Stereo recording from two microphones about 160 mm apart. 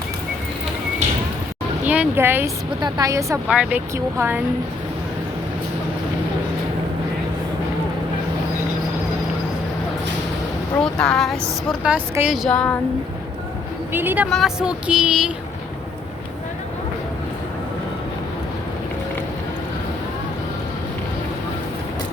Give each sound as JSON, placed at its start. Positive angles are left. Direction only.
{"t": 1.8, "sound": "speech", "side_deg": -10}
{"t": 3.5, "sound": "speech", "side_deg": -10}
{"t": 10.8, "sound": "speech", "side_deg": 5}
{"t": 11.8, "sound": "speech", "side_deg": -10}
{"t": 13.9, "sound": "speech", "side_deg": -10}
{"t": 14.3, "sound": "speech", "side_deg": 0}